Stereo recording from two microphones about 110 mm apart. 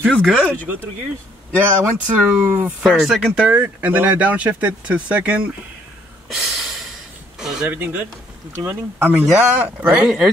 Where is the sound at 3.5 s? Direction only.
15° right (ahead or behind).